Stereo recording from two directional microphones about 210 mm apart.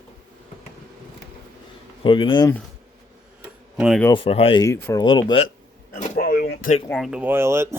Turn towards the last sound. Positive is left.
turn(degrees=-10)  # may be behind; listen again after turning